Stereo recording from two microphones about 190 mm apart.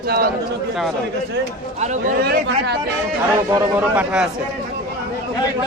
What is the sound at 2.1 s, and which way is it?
Speech, 55° right (ahead or behind).